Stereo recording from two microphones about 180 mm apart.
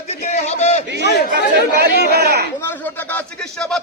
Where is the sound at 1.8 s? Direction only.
60° right (ahead or behind).